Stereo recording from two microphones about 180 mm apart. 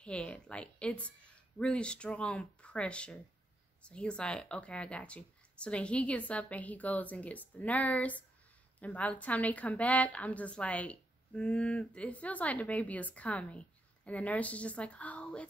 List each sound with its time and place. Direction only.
0.0 s a woman's voice: 5° left (ahead or behind)